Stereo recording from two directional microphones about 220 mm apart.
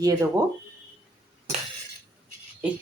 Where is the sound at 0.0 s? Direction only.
15° right (ahead or behind).